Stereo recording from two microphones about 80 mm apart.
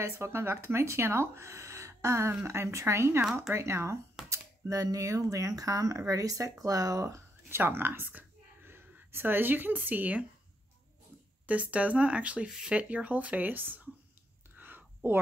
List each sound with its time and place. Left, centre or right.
0.0 s speech: right
4.3 s speech: right
7.4 s speech: right
11.4 s speech: centre
14.6 s whispering: right